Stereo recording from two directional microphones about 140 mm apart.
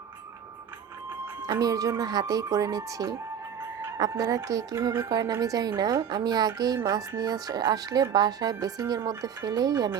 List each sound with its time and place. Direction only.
1.5 s speech: 25° right (ahead or behind)